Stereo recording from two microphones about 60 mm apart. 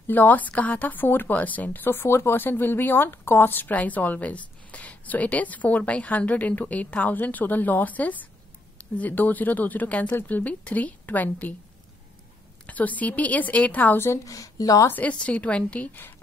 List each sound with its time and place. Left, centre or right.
0.0 s speech: left
2.0 s speech: left
12.6 s speech: left
13.9 s a woman's voice: left
14.2 s speech: left
14.9 s speech: left